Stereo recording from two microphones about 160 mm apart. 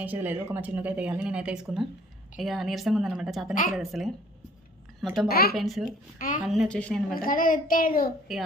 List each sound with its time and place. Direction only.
0.0 s a woman's voice: 10° right (ahead or behind)
3.5 s a child's voice: 55° left (ahead or behind)
3.8 s a woman's voice: centre (ahead or behind)
5.3 s speech: 70° left (ahead or behind)
5.5 s a woman's voice: centre (ahead or behind)
6.1 s a child's voice: 60° left (ahead or behind)
6.4 s a woman's voice: 5° right (ahead or behind)
6.7 s a woman's voice: 5° left (ahead or behind)
7.2 s a child's voice: 60° left (ahead or behind)